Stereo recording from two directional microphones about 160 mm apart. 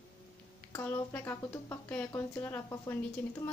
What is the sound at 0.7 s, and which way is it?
Speech, 15° left (ahead or behind).